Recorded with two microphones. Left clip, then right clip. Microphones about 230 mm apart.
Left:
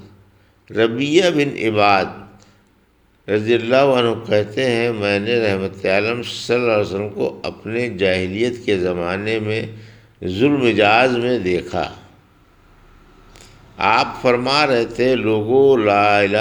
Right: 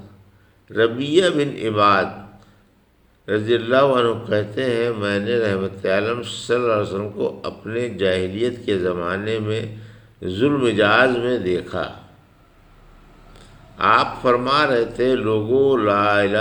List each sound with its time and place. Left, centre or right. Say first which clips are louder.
0.7 s a man's voice: left 2 dB; left
3.2 s a man's voice: left 2 dB; left
13.3 s a man's voice: left 3 dB; left